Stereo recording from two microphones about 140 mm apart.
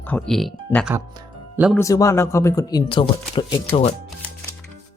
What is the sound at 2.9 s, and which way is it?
Speech, 40° left (ahead or behind).